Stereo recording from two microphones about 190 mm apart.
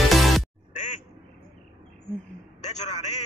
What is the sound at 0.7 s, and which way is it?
Quack, 40° left (ahead or behind).